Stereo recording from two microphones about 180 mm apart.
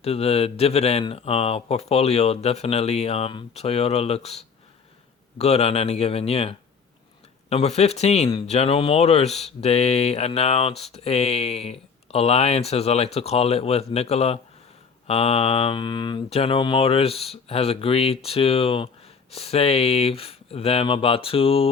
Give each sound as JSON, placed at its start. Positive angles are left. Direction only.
{"t": 0.0, "sound": "speech", "side_deg": 35}